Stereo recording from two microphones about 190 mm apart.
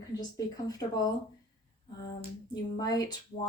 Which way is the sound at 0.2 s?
20° left (ahead or behind).